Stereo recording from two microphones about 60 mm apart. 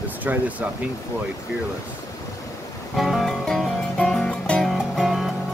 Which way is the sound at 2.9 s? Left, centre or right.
Centre.